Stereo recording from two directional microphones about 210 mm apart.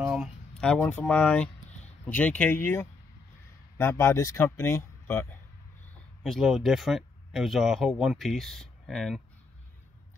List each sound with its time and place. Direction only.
0.0 s speech: 5° right (ahead or behind)